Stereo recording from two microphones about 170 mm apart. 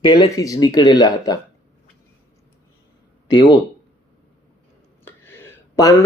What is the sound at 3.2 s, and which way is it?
Speech, 30° left (ahead or behind).